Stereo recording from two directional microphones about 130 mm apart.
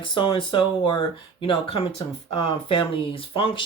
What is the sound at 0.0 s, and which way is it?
Speech, 40° left (ahead or behind).